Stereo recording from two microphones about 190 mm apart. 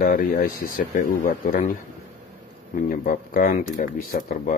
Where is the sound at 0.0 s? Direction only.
45° left (ahead or behind).